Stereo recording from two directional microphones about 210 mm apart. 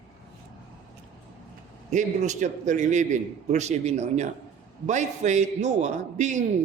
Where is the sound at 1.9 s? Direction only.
35° right (ahead or behind).